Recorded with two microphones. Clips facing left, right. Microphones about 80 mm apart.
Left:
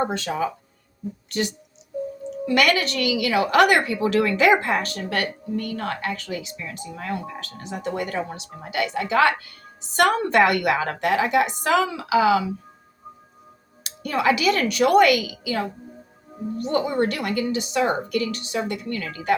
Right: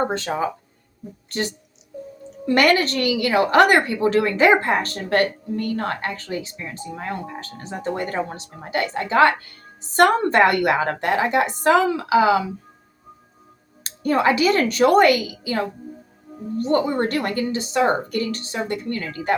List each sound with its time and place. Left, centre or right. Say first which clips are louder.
0.1 s a woman's voice: right 2 dB; right
13.8 s a woman's voice: right 3 dB; right